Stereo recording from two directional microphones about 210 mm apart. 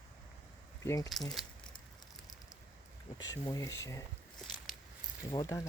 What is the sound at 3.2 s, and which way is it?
Speech, 15° left (ahead or behind).